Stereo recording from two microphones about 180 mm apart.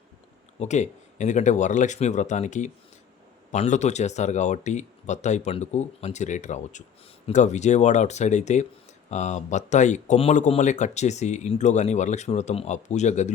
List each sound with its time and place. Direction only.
0.6 s speech: 40° left (ahead or behind)